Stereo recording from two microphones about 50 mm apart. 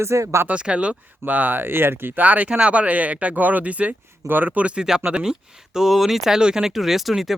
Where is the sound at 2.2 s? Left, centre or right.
Right.